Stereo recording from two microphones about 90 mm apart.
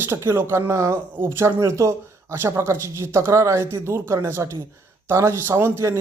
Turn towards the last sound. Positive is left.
turn(degrees=-30)  # may be behind; listen again after turning